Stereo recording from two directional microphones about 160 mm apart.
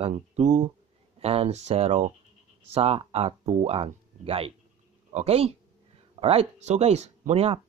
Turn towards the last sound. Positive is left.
turn(degrees=-40)  # may be behind; listen again after turning